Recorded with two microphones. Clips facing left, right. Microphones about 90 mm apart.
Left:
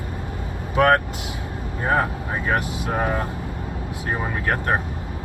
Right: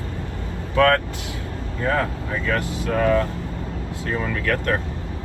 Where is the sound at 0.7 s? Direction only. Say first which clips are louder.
Even; 25° left (ahead or behind).